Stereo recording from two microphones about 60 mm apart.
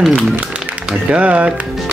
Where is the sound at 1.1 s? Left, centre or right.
Right.